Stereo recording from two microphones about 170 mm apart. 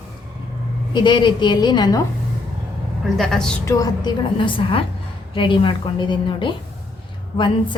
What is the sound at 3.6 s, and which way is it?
A woman's voice, 20° left (ahead or behind).